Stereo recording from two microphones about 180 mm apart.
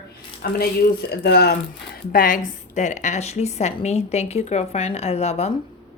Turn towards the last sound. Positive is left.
turn(degrees=35)  # may be behind; listen again after turning